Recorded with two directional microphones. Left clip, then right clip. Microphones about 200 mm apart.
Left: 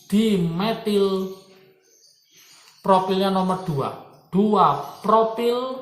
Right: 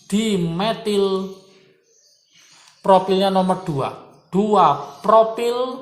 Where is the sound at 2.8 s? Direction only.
45° right (ahead or behind).